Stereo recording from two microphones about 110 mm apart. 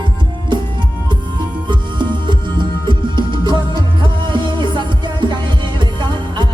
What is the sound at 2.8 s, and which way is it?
Music, 45° right (ahead or behind).